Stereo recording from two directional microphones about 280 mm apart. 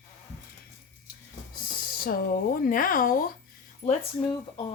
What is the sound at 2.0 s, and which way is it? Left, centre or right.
Speech, left.